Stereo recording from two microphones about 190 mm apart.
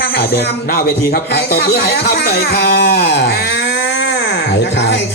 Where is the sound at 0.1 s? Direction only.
55° left (ahead or behind).